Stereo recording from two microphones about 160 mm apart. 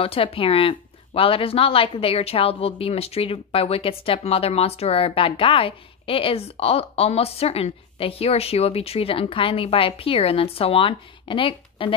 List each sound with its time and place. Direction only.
0.0 s speech: 35° left (ahead or behind)